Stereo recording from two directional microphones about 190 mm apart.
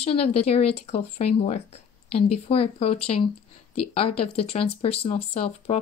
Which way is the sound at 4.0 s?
30° left (ahead or behind).